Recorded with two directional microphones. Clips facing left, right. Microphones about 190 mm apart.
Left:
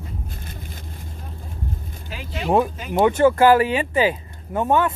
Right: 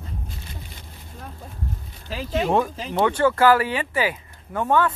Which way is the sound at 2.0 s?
35° right (ahead or behind).